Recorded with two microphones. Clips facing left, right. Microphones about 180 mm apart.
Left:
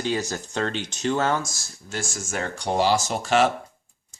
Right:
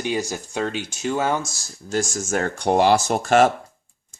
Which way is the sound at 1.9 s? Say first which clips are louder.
Right 8 dB; 40° right (ahead or behind).